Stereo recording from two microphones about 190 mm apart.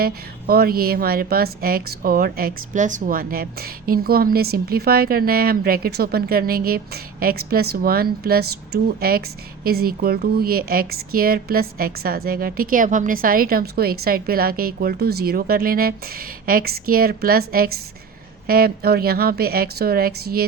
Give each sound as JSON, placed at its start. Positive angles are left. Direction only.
{"t": 0.0, "sound": "a woman's voice", "side_deg": -50}